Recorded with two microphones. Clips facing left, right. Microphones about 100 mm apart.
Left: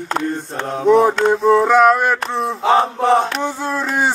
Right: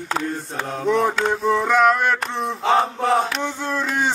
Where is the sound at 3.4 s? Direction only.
35° left (ahead or behind).